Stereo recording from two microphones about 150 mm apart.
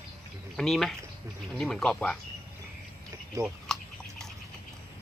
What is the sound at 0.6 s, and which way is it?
Speech, centre (ahead or behind).